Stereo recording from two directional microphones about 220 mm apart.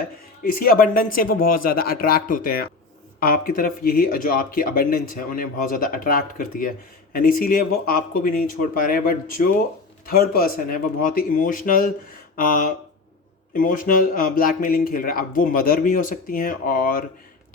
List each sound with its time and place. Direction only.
0.4 s speech: 40° left (ahead or behind)